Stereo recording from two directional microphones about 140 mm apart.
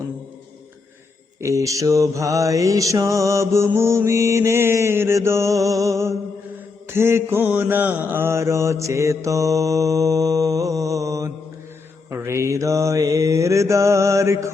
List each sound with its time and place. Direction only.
1.4 s mantra: 20° right (ahead or behind)